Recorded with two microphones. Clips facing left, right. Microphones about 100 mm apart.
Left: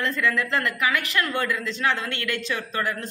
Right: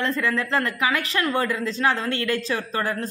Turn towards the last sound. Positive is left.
turn(degrees=-35)  # may be behind; listen again after turning